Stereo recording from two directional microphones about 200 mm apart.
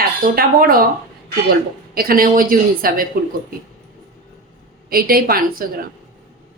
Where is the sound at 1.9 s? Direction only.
45° right (ahead or behind).